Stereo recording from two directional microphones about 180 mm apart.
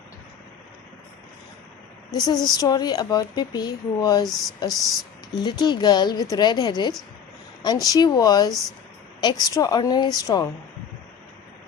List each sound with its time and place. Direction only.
2.1 s speech: 20° left (ahead or behind)